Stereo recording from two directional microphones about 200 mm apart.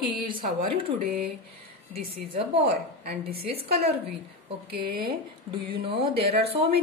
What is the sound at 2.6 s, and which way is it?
A woman's voice, 50° right (ahead or behind).